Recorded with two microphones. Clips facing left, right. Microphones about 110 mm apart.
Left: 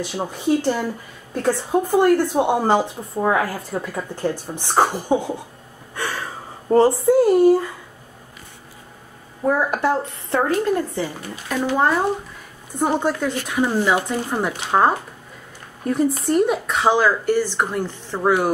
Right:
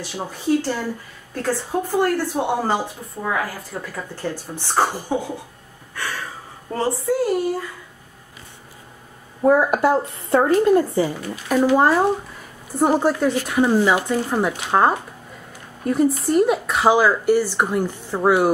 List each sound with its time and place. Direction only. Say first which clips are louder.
0.1 s a woman's voice: right 1 dB; 15° left (ahead or behind)
3.7 s speech: left 4 dB; 15° left (ahead or behind)
6.7 s a woman's voice: left 7 dB; 25° left (ahead or behind)
9.5 s a woman's voice: right 3 dB; 5° right (ahead or behind)